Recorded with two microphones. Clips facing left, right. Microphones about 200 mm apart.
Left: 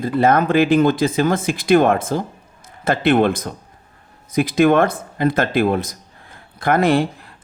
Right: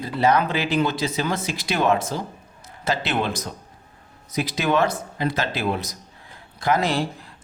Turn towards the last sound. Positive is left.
turn(degrees=55)  # may be behind; listen again after turning